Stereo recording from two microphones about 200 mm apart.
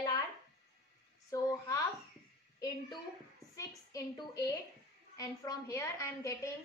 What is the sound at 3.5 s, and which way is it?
A woman's voice, 15° left (ahead or behind).